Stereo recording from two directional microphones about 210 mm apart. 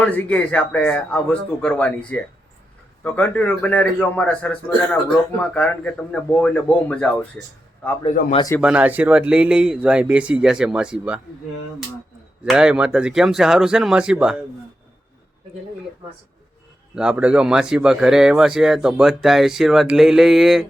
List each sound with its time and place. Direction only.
0.0 s a man's voice: 5° left (ahead or behind)
8.0 s speech: 30° left (ahead or behind)
8.6 s speech: 5° right (ahead or behind)
12.5 s speech: 5° right (ahead or behind)
16.9 s speech: 5° right (ahead or behind)